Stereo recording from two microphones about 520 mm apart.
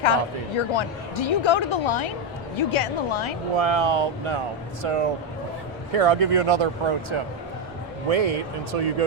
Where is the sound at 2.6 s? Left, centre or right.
Left.